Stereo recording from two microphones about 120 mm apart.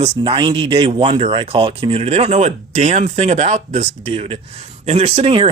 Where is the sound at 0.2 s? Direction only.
40° right (ahead or behind).